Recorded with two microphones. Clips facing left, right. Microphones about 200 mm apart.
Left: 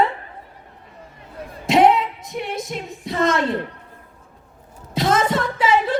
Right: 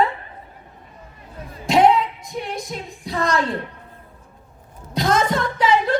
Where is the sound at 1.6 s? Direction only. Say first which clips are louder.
Left 1 dB; centre (ahead or behind).